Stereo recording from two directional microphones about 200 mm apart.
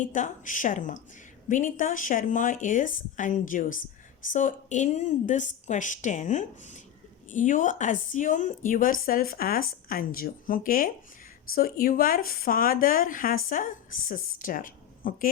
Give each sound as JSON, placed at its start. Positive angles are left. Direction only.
{"t": 0.0, "sound": "speech", "side_deg": 40}